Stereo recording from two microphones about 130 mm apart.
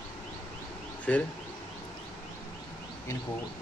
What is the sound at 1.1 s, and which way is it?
Speech, 10° left (ahead or behind).